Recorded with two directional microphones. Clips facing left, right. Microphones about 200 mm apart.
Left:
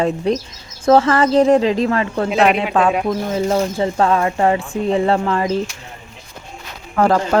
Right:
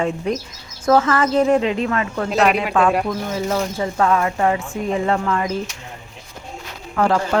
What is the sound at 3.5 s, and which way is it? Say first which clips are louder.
Speech: left 4 dB; 30° left (ahead or behind).